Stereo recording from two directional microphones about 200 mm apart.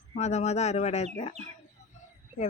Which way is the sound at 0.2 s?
35° left (ahead or behind).